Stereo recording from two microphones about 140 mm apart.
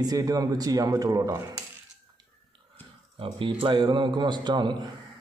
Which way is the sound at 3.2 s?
40° right (ahead or behind).